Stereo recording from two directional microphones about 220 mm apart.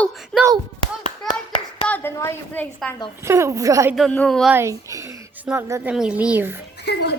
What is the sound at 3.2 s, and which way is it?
Speech, 10° right (ahead or behind).